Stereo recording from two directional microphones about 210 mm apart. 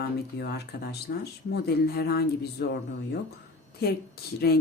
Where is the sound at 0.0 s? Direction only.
50° left (ahead or behind).